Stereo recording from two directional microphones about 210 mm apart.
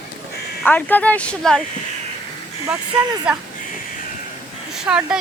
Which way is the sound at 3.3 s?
5° right (ahead or behind).